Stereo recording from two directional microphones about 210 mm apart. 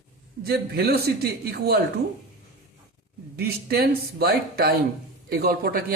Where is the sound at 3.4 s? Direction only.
45° right (ahead or behind).